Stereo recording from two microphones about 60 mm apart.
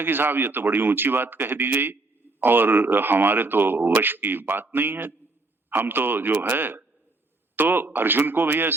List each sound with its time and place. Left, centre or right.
0.0 s speech: right